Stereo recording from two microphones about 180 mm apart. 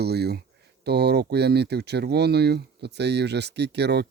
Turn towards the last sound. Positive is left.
turn(degrees=-70)  # may be behind; listen again after turning